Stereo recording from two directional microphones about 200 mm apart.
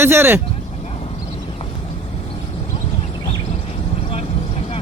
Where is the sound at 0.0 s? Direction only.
10° right (ahead or behind).